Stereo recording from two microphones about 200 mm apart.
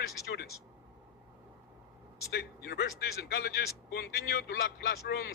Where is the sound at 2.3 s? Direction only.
50° left (ahead or behind).